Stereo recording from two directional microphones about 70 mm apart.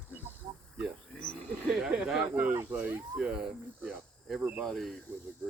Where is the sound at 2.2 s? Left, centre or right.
Right; by 4.4 s centre.